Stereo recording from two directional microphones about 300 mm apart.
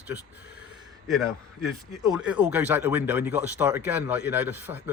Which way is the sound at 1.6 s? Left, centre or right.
Centre.